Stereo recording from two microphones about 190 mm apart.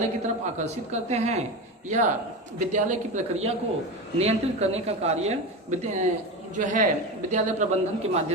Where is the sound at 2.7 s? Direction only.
40° right (ahead or behind).